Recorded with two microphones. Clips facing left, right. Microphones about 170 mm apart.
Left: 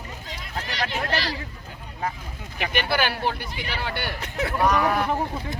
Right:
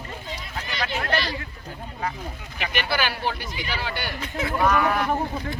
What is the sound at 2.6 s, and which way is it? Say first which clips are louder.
Speech: left 2 dB; 55° left (ahead or behind).